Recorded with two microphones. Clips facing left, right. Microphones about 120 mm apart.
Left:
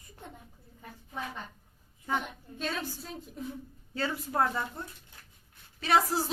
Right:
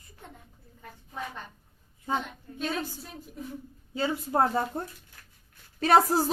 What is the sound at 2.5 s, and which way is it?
A woman's voice, 10° right (ahead or behind).